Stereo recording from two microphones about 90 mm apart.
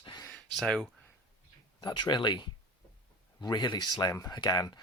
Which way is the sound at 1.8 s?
55° left (ahead or behind).